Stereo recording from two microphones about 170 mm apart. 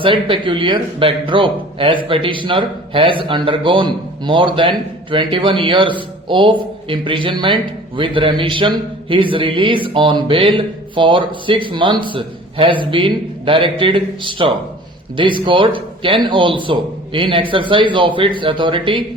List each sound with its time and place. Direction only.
0.0 s speech: 30° right (ahead or behind)